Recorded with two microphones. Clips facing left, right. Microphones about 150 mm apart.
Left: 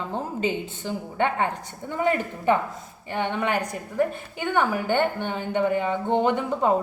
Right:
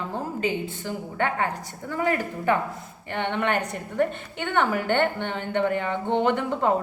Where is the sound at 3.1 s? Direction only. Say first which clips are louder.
Even; 10° left (ahead or behind).